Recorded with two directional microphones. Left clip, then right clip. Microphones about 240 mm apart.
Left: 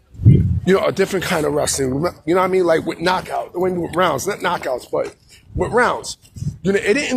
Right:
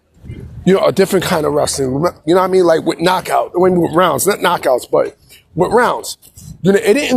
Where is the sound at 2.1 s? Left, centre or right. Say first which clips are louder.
Right 5 dB; centre.